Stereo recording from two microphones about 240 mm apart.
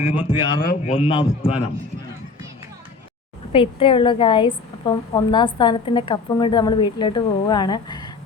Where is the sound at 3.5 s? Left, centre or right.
Left.